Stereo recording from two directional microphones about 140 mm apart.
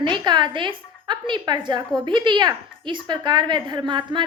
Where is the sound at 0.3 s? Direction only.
35° right (ahead or behind).